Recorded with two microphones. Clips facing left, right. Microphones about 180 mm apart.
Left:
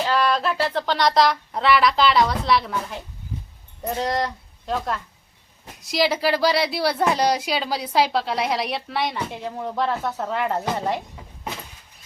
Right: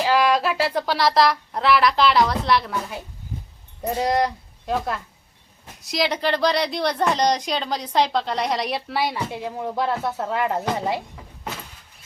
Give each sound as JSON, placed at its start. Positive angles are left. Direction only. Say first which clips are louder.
{"t": 0.0, "sound": "a woman's voice", "louder": "right 2 dB", "side_deg": -10}